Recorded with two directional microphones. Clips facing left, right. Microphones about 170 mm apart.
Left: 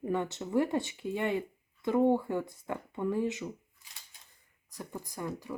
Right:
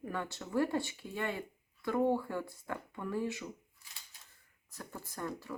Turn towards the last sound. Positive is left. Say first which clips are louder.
# left 3 dB
turn(degrees=15)  # may be behind; listen again after turning